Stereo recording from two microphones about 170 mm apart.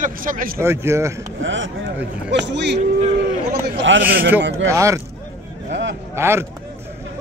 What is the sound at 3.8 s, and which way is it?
Speech, 90° right.